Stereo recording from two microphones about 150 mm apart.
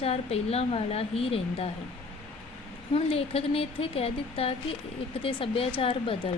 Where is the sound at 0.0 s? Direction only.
40° left (ahead or behind).